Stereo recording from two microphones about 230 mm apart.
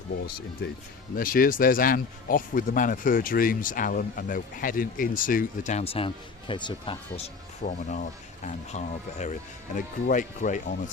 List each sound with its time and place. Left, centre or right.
1.1 s speech: left
7.6 s speech: left